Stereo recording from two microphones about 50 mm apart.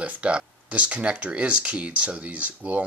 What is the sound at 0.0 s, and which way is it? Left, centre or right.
Speech, right.